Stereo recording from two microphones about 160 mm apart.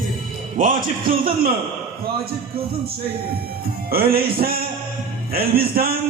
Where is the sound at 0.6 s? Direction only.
60° right (ahead or behind).